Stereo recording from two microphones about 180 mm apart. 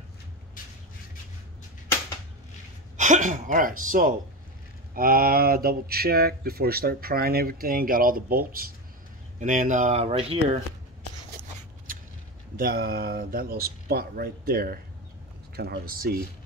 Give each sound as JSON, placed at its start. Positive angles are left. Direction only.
{"t": 3.0, "sound": "speech", "side_deg": -45}
{"t": 9.4, "sound": "speech", "side_deg": -45}
{"t": 12.5, "sound": "speech", "side_deg": -55}